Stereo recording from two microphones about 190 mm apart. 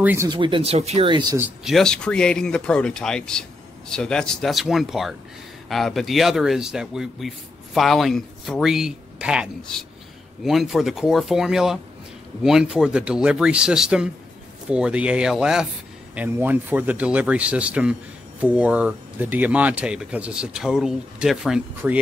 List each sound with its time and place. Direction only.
0.0 s speech: 10° right (ahead or behind)
0.3 s speech: 25° right (ahead or behind)
1.4 s speech: centre (ahead or behind)